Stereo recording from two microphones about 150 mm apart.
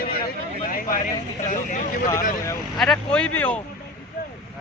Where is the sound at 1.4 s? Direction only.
55° left (ahead or behind).